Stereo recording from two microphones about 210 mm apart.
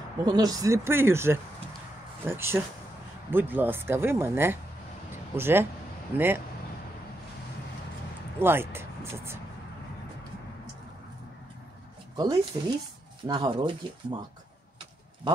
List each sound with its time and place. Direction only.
0.2 s speech: 20° right (ahead or behind)
8.4 s speech: 10° right (ahead or behind)
12.2 s speech: 20° right (ahead or behind)